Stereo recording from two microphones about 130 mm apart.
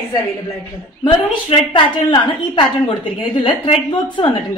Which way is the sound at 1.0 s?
40° left (ahead or behind).